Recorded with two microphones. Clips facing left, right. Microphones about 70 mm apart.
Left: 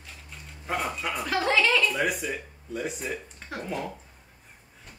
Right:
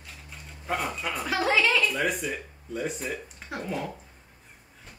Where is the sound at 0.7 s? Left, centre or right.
Centre.